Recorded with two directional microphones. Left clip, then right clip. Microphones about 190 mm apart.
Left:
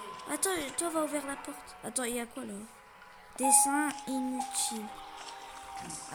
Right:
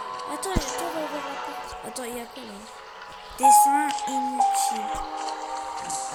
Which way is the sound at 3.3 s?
5° left (ahead or behind).